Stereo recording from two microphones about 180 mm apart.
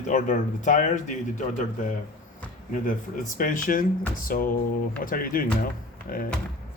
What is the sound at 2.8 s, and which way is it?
A man's voice, 45° left (ahead or behind).